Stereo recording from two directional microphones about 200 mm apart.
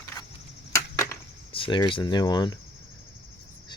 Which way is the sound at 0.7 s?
15° left (ahead or behind).